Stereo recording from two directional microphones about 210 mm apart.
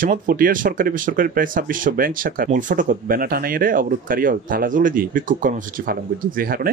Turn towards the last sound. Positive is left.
turn(degrees=-45)  # may be behind; listen again after turning